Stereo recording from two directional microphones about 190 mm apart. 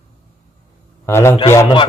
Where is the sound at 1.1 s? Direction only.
15° left (ahead or behind).